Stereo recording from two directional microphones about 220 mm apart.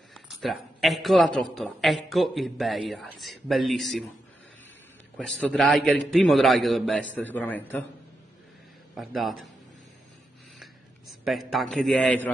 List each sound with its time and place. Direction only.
0.1 s a man's voice: centre (ahead or behind)
5.5 s a man's voice: centre (ahead or behind)
8.9 s a man's voice: centre (ahead or behind)
10.6 s a sound: centre (ahead or behind)